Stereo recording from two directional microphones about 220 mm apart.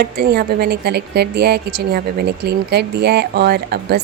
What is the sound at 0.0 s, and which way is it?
A woman's voice, 45° right (ahead or behind).